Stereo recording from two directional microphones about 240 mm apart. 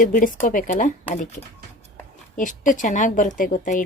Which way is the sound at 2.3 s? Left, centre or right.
Left.